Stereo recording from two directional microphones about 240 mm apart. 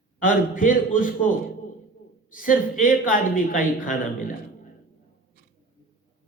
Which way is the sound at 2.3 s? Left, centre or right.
Left.